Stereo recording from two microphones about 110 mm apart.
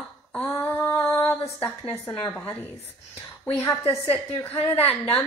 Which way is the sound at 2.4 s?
20° left (ahead or behind).